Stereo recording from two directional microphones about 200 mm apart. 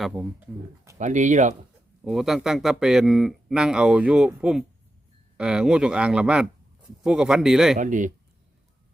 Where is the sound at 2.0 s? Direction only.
Centre (ahead or behind).